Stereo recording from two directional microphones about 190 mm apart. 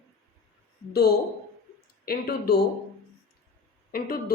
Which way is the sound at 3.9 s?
50° left (ahead or behind).